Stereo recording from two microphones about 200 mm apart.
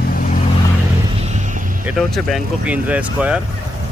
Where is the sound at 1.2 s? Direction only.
35° right (ahead or behind).